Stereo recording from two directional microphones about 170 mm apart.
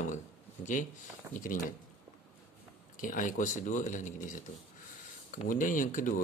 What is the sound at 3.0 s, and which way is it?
Speech, 50° left (ahead or behind).